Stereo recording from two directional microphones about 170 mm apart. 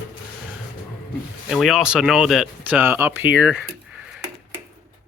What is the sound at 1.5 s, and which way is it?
Speech, centre (ahead or behind).